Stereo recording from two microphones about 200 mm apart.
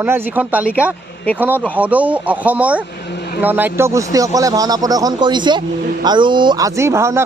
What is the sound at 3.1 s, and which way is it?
Vehicle, 55° left (ahead or behind).